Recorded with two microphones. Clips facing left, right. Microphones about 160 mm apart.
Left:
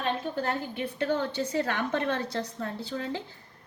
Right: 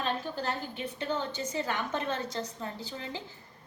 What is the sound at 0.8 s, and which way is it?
Speech, 60° left (ahead or behind).